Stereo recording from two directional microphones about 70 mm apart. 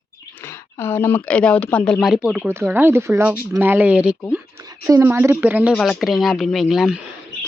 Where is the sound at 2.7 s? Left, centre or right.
Right.